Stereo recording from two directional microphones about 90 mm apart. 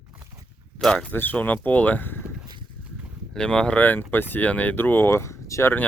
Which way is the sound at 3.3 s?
10° left (ahead or behind).